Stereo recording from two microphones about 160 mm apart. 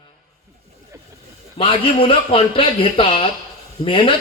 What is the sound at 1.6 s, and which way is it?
A man's voice, 35° left (ahead or behind).